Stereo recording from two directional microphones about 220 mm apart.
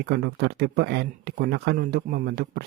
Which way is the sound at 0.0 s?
50° right (ahead or behind).